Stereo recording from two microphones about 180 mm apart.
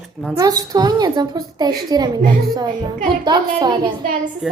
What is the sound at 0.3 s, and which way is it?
A woman's voice, 20° right (ahead or behind).